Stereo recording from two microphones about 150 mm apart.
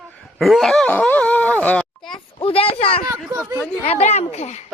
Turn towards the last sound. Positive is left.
turn(degrees=50)  # may be behind; listen again after turning